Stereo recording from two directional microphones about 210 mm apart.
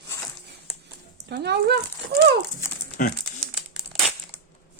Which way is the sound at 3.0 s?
40° left (ahead or behind).